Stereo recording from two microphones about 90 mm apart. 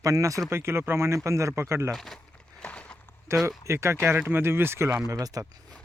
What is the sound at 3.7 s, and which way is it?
Speech, 30° right (ahead or behind).